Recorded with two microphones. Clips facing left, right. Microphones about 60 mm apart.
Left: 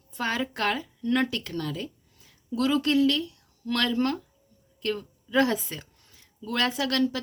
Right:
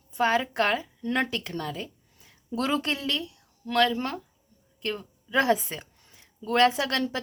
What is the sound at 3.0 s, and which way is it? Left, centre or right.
A woman's voice, centre.